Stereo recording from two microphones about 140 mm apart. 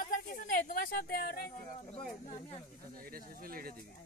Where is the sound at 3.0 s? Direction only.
90° right.